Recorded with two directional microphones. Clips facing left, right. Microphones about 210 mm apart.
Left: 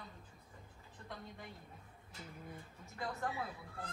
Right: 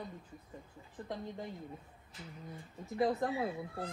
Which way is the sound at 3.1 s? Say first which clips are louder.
Right 4 dB; 35° right (ahead or behind).